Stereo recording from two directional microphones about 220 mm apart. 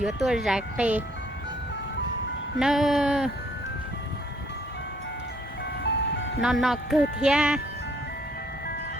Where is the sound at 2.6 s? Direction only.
Centre (ahead or behind).